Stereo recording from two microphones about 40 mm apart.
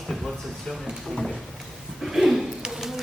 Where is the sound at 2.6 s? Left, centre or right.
Centre.